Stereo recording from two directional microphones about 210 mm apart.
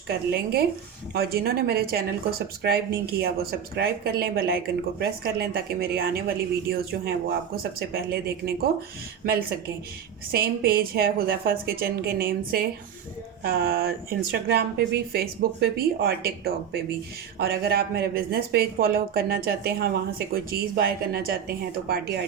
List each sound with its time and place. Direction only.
0.1 s a woman's voice: 50° right (ahead or behind)